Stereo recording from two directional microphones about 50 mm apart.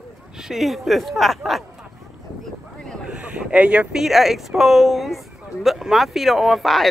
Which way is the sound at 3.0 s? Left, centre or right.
Right.